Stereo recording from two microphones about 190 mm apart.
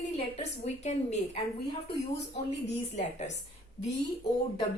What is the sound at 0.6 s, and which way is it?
Speech, 35° left (ahead or behind).